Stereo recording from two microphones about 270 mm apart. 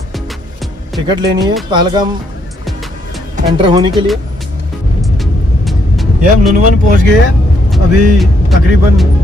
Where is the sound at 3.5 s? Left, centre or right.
Centre.